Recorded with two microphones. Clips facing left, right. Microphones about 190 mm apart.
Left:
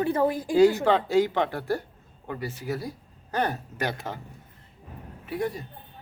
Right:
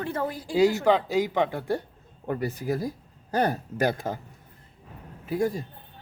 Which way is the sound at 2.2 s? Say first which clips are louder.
Right 4 dB; 45° right (ahead or behind).